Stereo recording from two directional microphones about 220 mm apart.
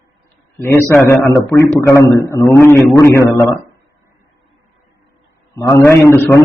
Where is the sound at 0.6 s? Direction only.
10° left (ahead or behind).